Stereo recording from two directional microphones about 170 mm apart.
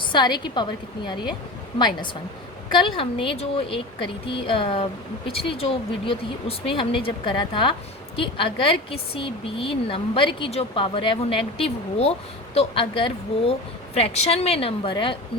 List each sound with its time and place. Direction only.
0.0 s a woman's voice: 25° left (ahead or behind)
2.7 s a woman's voice: 30° left (ahead or behind)